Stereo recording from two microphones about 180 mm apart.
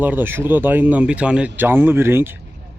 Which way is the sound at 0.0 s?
10° right (ahead or behind).